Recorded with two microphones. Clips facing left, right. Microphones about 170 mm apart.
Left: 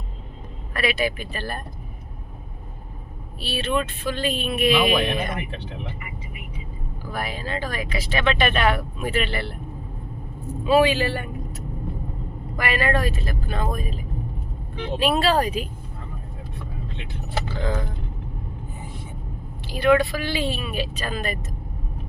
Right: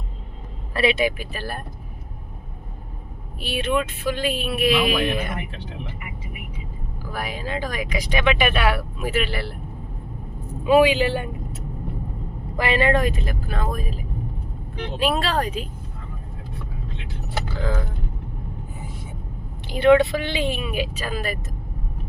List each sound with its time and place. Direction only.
0.7 s speech: 25° right (ahead or behind)
1.2 s speech: 10° right (ahead or behind)
3.4 s speech: 15° right (ahead or behind)
7.1 s speech: 10° right (ahead or behind)
10.6 s speech: 15° right (ahead or behind)
12.5 s speech: 25° right (ahead or behind)
13.5 s speech: centre (ahead or behind)
19.6 s speech: 20° right (ahead or behind); by 21.3 s 5° right (ahead or behind)